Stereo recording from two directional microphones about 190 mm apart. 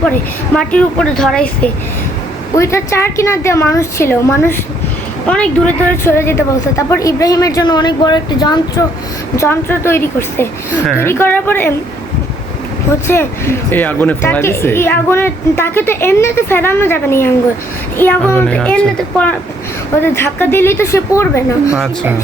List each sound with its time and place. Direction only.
0.0 s speech: 5° left (ahead or behind)
2.6 s a woman's voice: 15° left (ahead or behind)
13.1 s a woman's voice: 15° left (ahead or behind)